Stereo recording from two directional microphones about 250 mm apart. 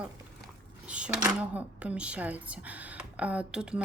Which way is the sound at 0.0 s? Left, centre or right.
Centre.